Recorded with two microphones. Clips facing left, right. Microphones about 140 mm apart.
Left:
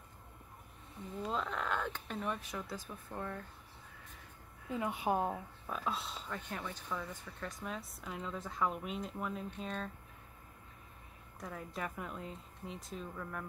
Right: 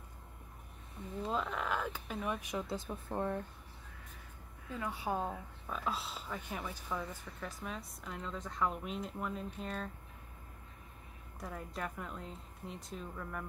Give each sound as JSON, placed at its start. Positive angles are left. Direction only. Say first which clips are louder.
{"t": 1.3, "sound": "speech", "louder": "right 1 dB", "side_deg": -5}
{"t": 2.4, "sound": "speech", "louder": "right 4 dB", "side_deg": -20}
{"t": 4.6, "sound": "speech", "louder": "left 3 dB", "side_deg": 20}
{"t": 5.7, "sound": "speech", "louder": "even", "side_deg": 0}
{"t": 11.3, "sound": "speech", "louder": "even", "side_deg": 0}